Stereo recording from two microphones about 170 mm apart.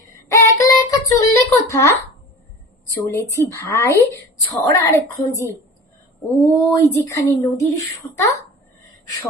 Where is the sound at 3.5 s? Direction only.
15° left (ahead or behind).